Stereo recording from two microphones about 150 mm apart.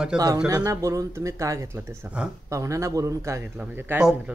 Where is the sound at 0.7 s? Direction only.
20° right (ahead or behind).